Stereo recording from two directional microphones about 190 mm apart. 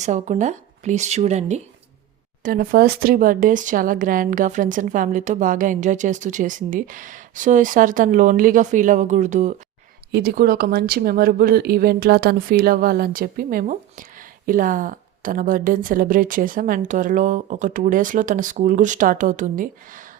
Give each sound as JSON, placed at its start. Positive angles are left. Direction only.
{"t": 0.0, "sound": "speech", "side_deg": -40}
{"t": 2.4, "sound": "speech", "side_deg": -50}
{"t": 10.1, "sound": "speech", "side_deg": -55}